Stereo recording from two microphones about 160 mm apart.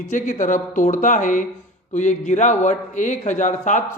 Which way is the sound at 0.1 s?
55° left (ahead or behind).